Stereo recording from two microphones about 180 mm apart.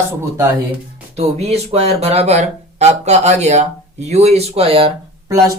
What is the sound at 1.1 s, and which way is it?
Speech, 35° right (ahead or behind).